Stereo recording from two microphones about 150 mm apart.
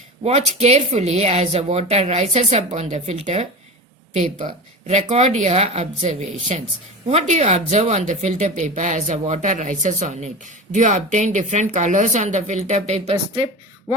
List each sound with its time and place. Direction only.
0.2 s speech: 45° right (ahead or behind)
4.4 s speech: 50° right (ahead or behind)
13.9 s a sound: 25° right (ahead or behind)